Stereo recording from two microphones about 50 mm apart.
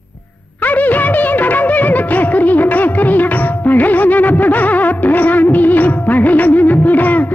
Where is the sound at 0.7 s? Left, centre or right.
Left.